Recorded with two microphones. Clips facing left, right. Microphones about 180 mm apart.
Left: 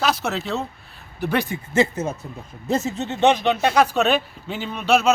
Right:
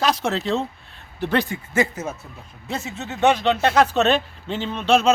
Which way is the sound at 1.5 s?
25° left (ahead or behind).